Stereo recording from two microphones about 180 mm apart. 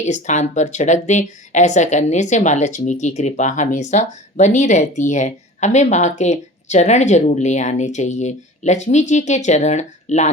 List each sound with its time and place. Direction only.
0.0 s speech: 40° left (ahead or behind)